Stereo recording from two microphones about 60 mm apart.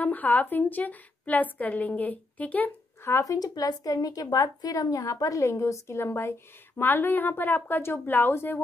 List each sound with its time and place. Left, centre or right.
0.0 s a woman's voice: left
3.1 s speech: left
6.8 s speech: left